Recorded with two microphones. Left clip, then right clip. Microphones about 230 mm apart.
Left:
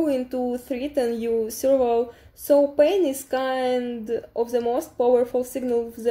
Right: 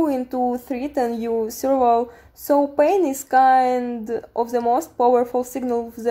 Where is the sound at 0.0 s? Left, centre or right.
Right.